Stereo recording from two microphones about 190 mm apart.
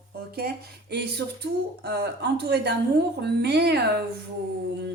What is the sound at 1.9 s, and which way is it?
Speech, 60° right (ahead or behind).